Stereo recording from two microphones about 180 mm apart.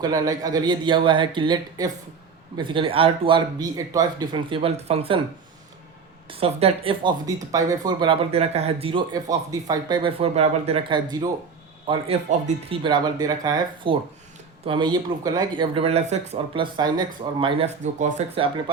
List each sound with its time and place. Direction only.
0.0 s speech: 20° right (ahead or behind)
6.3 s speech: 30° right (ahead or behind)
7.3 s speech: 20° right (ahead or behind); by 16.6 s 35° right (ahead or behind)
16.7 s speech: 25° right (ahead or behind)